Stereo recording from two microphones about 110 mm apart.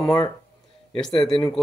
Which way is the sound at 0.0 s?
30° left (ahead or behind).